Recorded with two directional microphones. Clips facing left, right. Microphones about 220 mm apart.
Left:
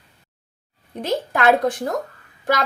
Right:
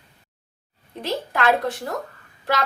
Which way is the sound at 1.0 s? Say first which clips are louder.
Left 3 dB; 50° left (ahead or behind).